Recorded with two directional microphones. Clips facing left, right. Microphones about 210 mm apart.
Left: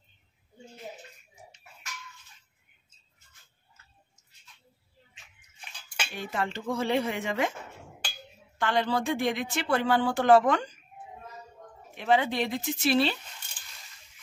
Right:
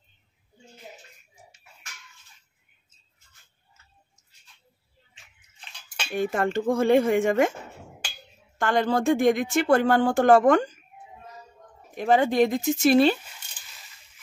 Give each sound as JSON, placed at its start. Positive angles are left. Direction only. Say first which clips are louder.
{"t": 6.1, "sound": "speech", "louder": "right 9 dB", "side_deg": -50}
{"t": 8.5, "sound": "speech", "louder": "right 4 dB", "side_deg": -45}
{"t": 11.9, "sound": "speech", "louder": "right 4 dB", "side_deg": -45}